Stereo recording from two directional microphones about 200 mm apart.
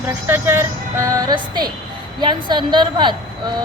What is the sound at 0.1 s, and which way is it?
A woman's voice, 10° right (ahead or behind).